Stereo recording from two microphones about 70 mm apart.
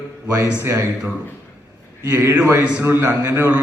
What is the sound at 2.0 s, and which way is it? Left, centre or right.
A man's voice, right.